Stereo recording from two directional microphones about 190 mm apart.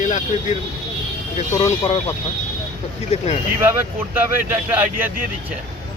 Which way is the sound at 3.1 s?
35° left (ahead or behind).